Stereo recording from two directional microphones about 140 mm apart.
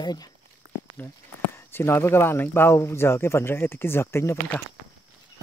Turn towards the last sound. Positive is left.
turn(degrees=20)  # may be behind; listen again after turning